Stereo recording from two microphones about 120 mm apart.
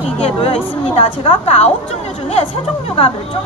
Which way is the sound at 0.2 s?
50° left (ahead or behind).